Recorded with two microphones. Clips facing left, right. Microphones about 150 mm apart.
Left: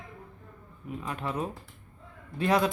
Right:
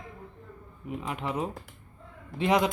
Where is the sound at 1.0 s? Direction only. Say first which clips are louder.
Right 1 dB; 20° right (ahead or behind).